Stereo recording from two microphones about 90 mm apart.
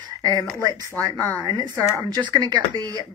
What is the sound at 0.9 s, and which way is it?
Speech, 40° right (ahead or behind).